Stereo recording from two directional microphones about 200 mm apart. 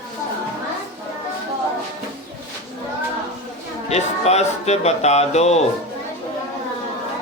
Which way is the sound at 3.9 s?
35° left (ahead or behind).